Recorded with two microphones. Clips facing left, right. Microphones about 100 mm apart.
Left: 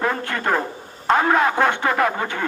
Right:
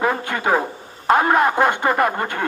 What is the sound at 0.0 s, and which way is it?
A woman's voice, 5° right (ahead or behind).